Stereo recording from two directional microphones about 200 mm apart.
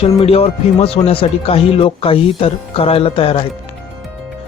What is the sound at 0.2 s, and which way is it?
Speech, 30° left (ahead or behind).